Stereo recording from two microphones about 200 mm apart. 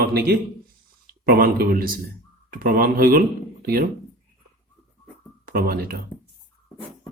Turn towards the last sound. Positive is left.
turn(degrees=-45)  # may be behind; listen again after turning